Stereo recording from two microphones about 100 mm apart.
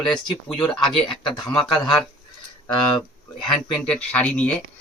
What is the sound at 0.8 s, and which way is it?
Speech, 55° left (ahead or behind).